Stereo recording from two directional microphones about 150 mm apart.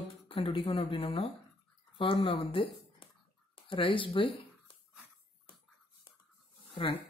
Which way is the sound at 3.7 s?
35° left (ahead or behind).